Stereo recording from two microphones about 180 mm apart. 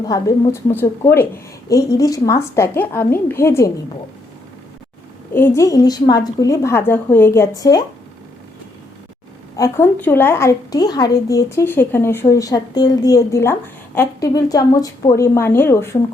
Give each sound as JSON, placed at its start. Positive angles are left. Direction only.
{"t": 0.1, "sound": "a woman's voice", "side_deg": 15}
{"t": 5.3, "sound": "a woman's voice", "side_deg": 15}
{"t": 9.6, "sound": "a woman's voice", "side_deg": 15}